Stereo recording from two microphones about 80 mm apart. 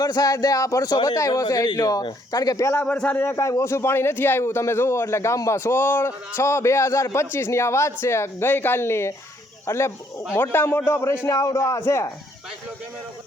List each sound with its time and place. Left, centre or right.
0.0 s speech: left
2.8 s a man's voice: centre
3.2 s a man's voice: left
11.3 s a man's voice: left